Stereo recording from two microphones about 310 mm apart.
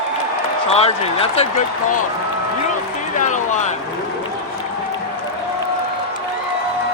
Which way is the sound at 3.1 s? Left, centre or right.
Left.